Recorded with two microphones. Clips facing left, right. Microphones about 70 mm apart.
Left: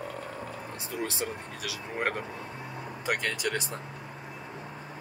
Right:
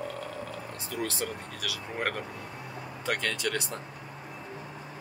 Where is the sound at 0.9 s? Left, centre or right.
Centre.